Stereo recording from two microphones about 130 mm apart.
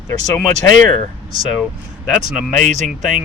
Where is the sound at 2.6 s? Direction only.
65° right (ahead or behind).